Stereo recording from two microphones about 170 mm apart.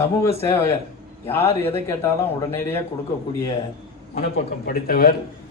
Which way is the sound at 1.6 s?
15° left (ahead or behind).